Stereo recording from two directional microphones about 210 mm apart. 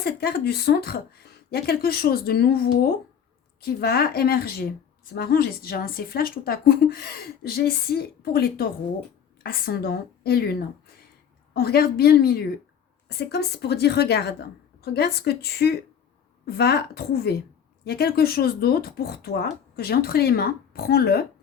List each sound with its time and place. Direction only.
0.0 s a woman's voice: 50° left (ahead or behind)